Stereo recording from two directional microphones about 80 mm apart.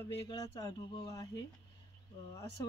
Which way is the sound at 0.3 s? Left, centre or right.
Left.